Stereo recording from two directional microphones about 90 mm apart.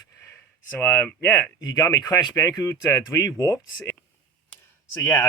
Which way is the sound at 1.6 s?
40° left (ahead or behind).